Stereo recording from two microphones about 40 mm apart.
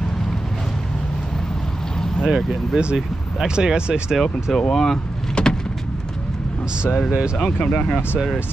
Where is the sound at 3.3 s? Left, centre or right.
Centre.